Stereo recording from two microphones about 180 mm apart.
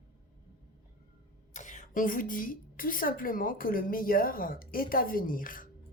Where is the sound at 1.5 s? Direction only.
45° left (ahead or behind).